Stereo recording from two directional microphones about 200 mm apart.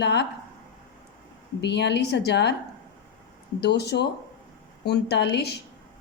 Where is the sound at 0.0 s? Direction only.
55° left (ahead or behind).